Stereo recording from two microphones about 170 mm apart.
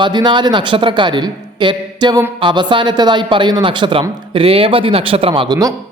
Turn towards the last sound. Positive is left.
turn(degrees=-25)  # may be behind; listen again after turning